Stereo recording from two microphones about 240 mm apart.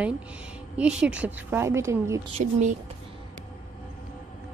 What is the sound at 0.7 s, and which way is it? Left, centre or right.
A woman's voice, centre.